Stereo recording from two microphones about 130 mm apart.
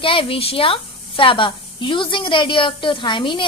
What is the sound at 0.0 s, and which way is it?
A woman's voice, 45° left (ahead or behind).